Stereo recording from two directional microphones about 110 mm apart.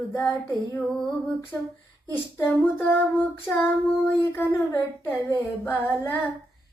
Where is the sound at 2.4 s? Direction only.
20° left (ahead or behind).